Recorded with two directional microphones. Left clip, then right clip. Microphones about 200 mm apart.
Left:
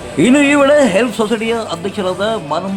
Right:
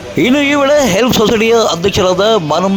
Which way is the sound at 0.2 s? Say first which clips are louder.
Even; 40° right (ahead or behind).